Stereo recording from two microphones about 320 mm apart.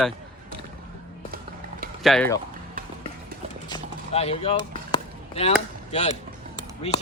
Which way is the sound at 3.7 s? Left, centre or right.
Centre.